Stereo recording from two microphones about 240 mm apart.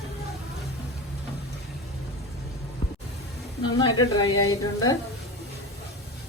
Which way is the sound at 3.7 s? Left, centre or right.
Centre.